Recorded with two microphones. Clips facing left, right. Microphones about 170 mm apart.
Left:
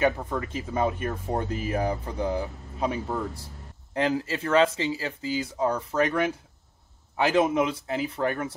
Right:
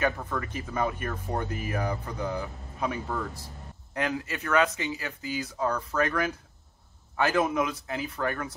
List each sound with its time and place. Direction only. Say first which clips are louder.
0.0 s speech: left 4 dB; 25° left (ahead or behind)